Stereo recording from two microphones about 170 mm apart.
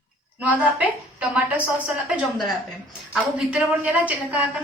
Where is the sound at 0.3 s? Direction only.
10° right (ahead or behind).